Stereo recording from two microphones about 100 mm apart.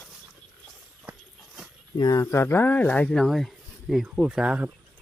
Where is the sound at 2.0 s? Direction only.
40° left (ahead or behind).